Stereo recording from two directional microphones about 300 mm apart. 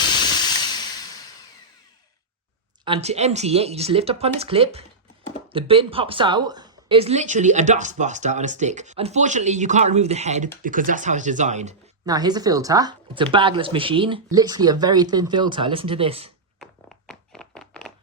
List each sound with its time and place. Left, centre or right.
0.0 s hiss: centre
2.8 s speech: centre
12.0 s speech: centre
16.6 s a sound: centre